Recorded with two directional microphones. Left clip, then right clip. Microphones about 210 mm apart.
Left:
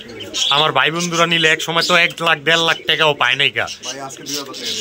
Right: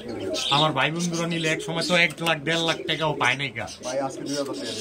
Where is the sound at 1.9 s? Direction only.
5° right (ahead or behind).